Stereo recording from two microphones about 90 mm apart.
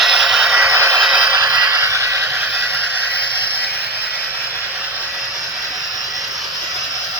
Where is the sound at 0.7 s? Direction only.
30° right (ahead or behind).